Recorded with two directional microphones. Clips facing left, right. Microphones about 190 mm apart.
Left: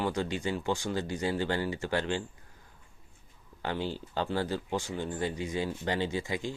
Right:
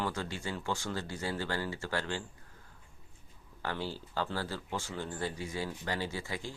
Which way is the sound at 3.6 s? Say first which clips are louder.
Left 4 dB; 20° left (ahead or behind).